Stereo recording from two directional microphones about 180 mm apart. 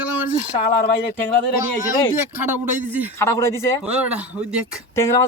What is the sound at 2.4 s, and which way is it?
Speech, 10° right (ahead or behind).